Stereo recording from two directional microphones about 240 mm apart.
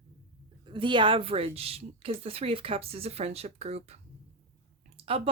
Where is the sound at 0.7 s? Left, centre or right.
Centre.